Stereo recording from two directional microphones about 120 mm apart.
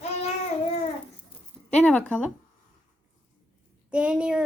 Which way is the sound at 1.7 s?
10° left (ahead or behind).